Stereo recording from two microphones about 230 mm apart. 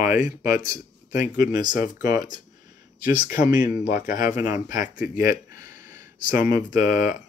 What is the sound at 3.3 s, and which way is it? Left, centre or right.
Speech, left.